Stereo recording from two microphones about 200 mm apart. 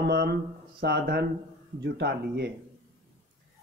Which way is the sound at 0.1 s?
55° right (ahead or behind).